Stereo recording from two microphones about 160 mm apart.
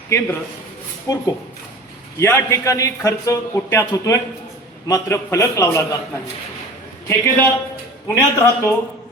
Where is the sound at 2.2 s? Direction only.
15° left (ahead or behind).